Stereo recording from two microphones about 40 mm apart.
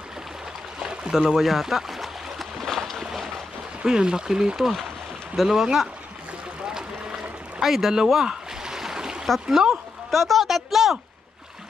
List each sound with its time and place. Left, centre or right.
1.1 s a sound: centre
2.6 s boat: centre
3.8 s speech: centre
5.3 s speech: centre
6.6 s boat: centre
7.6 s a sound: centre
9.5 s speech: centre
10.1 s a woman's voice: centre